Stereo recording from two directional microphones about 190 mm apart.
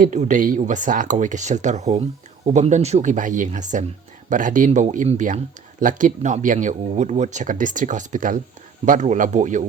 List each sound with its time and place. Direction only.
0.0 s speech: 40° right (ahead or behind)